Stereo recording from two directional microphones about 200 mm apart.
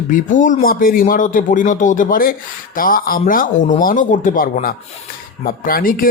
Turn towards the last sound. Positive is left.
turn(degrees=45)  # may be behind; listen again after turning